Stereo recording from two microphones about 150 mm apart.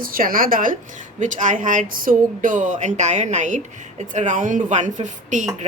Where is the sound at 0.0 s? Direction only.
70° right (ahead or behind); by 5.5 s 55° right (ahead or behind).